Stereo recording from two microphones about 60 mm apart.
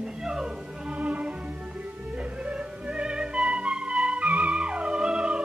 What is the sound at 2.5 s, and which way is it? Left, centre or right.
Music, centre.